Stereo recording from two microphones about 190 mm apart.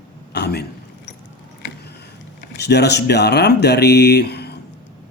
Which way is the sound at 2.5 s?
60° left (ahead or behind).